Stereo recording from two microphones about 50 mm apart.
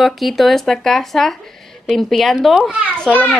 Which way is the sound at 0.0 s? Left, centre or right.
Centre.